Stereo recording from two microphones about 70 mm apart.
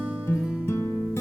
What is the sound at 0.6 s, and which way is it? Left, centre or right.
Music, left.